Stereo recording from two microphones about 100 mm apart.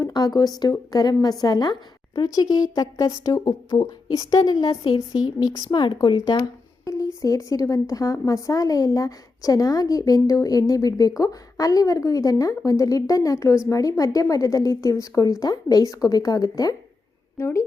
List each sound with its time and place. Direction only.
0.0 s speech: 40° left (ahead or behind)